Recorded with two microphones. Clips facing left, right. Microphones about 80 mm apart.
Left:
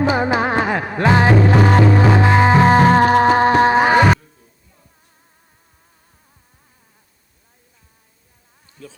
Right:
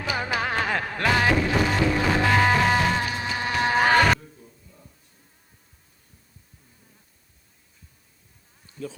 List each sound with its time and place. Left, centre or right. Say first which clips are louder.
0.0 s music: left 10 dB; left
3.8 s music: left 6 dB; centre